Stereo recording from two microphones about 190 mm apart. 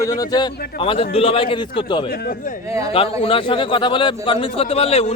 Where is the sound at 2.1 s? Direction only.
50° left (ahead or behind).